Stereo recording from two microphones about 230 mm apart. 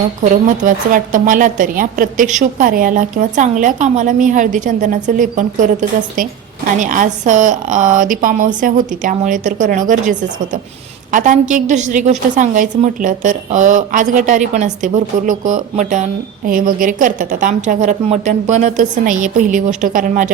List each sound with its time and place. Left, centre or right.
0.2 s a woman's voice: right